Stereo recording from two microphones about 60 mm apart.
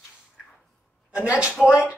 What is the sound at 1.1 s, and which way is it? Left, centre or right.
Speech, centre.